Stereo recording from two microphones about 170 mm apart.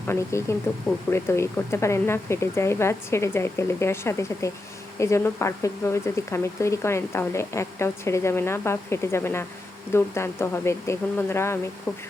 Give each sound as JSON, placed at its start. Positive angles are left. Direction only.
{"t": 0.1, "sound": "speech", "side_deg": 15}